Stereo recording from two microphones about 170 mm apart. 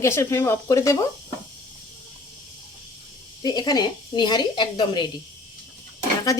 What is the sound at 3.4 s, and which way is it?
A woman's voice, 25° left (ahead or behind).